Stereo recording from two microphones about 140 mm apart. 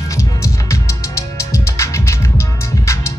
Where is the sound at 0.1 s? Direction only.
20° left (ahead or behind).